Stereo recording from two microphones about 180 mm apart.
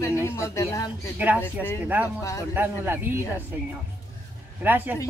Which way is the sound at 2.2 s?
15° left (ahead or behind).